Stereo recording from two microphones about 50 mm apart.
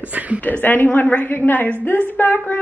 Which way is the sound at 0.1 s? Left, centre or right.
Right.